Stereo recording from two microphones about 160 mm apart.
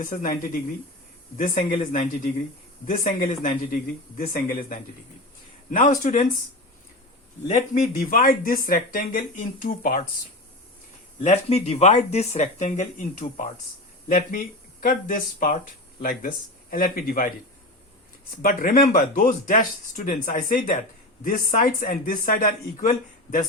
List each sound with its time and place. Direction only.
0.0 s speech: 60° left (ahead or behind)
5.7 s speech: 55° left (ahead or behind)
7.7 s speech: 55° left (ahead or behind)
11.2 s speech: 45° left (ahead or behind); by 17.3 s 60° left (ahead or behind)
18.4 s speech: 65° left (ahead or behind)